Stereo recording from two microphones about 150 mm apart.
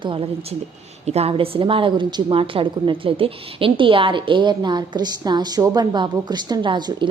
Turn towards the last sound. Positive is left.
turn(degrees=-30)  # may be behind; listen again after turning